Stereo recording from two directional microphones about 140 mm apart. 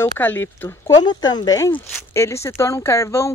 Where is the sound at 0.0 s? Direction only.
15° left (ahead or behind).